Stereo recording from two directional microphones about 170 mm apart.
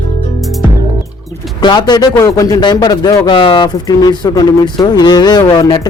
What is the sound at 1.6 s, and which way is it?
Speech, 25° left (ahead or behind).